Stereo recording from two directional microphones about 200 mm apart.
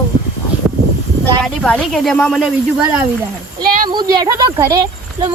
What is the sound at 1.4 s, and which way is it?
Speech, 5° left (ahead or behind).